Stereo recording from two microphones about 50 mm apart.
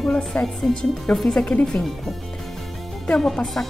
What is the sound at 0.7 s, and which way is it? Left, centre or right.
Speech, centre.